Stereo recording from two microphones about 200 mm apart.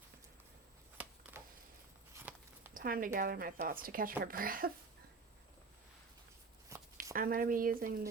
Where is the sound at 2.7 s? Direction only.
45° right (ahead or behind).